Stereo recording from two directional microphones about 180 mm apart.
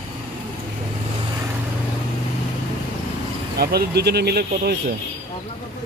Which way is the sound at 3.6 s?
60° right (ahead or behind).